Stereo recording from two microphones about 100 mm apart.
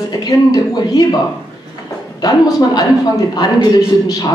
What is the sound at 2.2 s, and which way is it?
A woman's voice, 35° left (ahead or behind).